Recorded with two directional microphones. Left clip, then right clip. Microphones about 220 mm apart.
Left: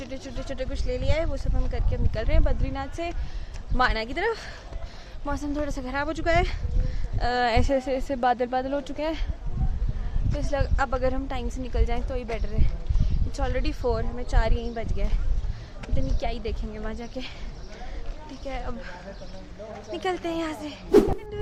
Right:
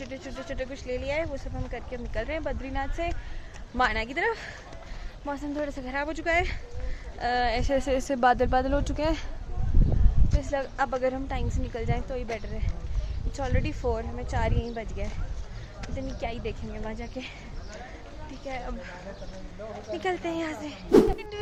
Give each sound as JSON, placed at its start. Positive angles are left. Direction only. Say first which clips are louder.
{"t": 0.4, "sound": "a woman's voice", "louder": "left 2 dB", "side_deg": 15}
{"t": 7.4, "sound": "a woman's voice", "louder": "left 4 dB", "side_deg": 30}
{"t": 7.8, "sound": "a woman's voice", "louder": "right 1 dB", "side_deg": 0}
{"t": 10.3, "sound": "a woman's voice", "louder": "left 1 dB", "side_deg": 15}
{"t": 10.8, "sound": "a woman's voice", "louder": "even", "side_deg": 0}
{"t": 18.4, "sound": "a woman's voice", "louder": "left 1 dB", "side_deg": 15}